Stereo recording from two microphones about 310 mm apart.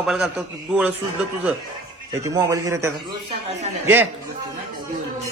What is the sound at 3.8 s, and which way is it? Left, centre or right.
Speech, centre.